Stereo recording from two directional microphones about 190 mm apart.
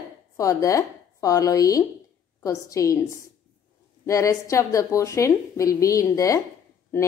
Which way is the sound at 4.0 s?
15° left (ahead or behind).